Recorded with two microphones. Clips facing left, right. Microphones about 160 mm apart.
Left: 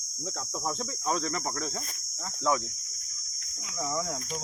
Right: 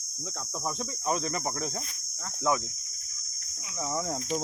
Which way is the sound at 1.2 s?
15° right (ahead or behind).